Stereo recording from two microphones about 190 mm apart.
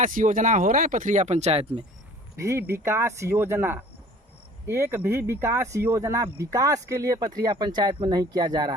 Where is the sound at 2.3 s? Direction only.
15° right (ahead or behind).